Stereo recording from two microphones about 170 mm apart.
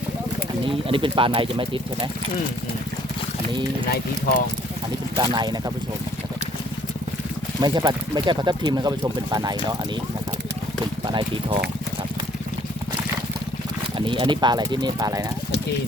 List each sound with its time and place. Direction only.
0.6 s speech: 30° right (ahead or behind)
5.1 s speech: 25° right (ahead or behind)
7.6 s speech: 25° right (ahead or behind)
11.0 s speech: 25° right (ahead or behind)
14.0 s speech: 30° right (ahead or behind)